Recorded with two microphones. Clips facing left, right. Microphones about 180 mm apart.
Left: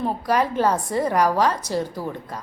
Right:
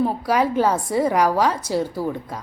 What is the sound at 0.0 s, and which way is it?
A woman's voice, 10° right (ahead or behind).